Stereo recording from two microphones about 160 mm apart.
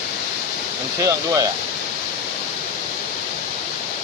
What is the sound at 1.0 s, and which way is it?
Speech, 20° right (ahead or behind).